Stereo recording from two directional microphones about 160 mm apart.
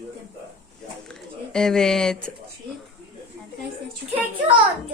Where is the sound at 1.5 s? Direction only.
5° left (ahead or behind).